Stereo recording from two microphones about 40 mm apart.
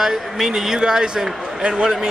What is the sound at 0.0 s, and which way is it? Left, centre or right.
A man's voice, centre.